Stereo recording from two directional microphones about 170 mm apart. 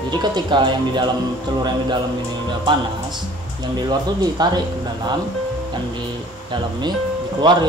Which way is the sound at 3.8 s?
25° right (ahead or behind).